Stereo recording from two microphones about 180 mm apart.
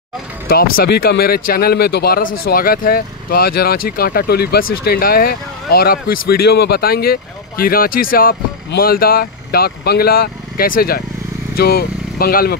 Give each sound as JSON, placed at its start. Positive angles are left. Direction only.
{"t": 0.5, "sound": "speech", "side_deg": 60}